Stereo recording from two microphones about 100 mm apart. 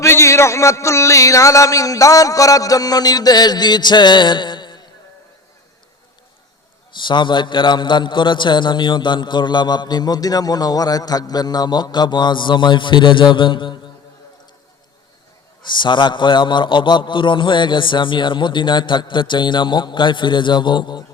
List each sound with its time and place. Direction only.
0.0 s speech: 30° left (ahead or behind); by 4.8 s 50° left (ahead or behind)
6.9 s a man's voice: 50° left (ahead or behind)
15.6 s a man's voice: 50° left (ahead or behind)